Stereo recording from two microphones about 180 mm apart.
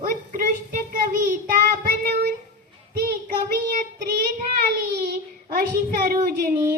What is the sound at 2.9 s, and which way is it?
A child's voice, 55° right (ahead or behind).